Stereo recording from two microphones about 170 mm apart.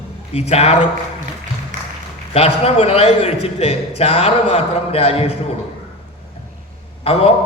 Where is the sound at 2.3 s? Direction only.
35° left (ahead or behind).